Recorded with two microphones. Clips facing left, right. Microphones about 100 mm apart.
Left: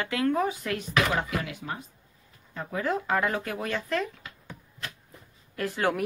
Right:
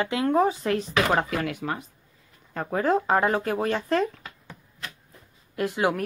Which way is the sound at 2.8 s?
35° right (ahead or behind).